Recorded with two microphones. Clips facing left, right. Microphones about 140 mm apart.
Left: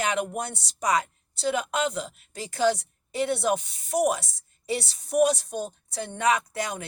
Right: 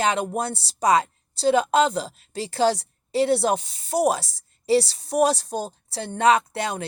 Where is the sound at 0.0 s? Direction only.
30° right (ahead or behind).